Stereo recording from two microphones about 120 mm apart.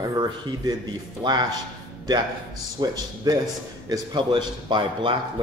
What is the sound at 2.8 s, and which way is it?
Speech, 35° right (ahead or behind).